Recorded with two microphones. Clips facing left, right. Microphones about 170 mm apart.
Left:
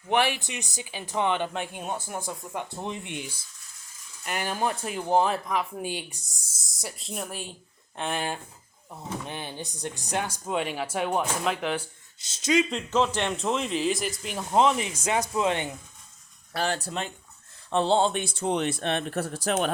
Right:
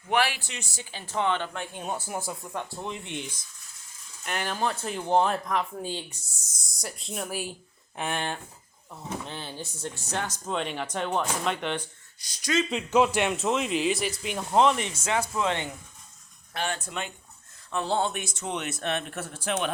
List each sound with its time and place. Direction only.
0.1 s speech: 20° left (ahead or behind)
1.8 s speech: 5° right (ahead or behind)
2.5 s speech: 15° left (ahead or behind)
3.2 s speech: 10° left (ahead or behind)
6.6 s speech: centre (ahead or behind)
8.9 s speech: 15° left (ahead or behind)
12.2 s speech: 25° left (ahead or behind)
12.7 s speech: 10° right (ahead or behind); by 15.7 s 20° left (ahead or behind)
16.5 s speech: 35° left (ahead or behind)